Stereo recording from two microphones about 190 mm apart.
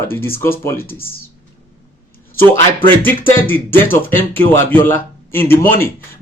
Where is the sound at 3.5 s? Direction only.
10° left (ahead or behind).